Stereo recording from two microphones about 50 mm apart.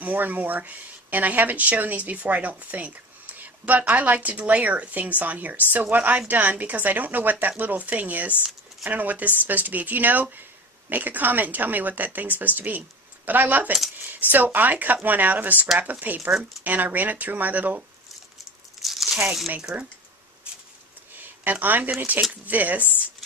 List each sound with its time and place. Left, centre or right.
0.0 s a woman's voice: right
18.8 s tearing: centre
19.7 s speech: centre
21.2 s a sound: right
22.3 s speech: right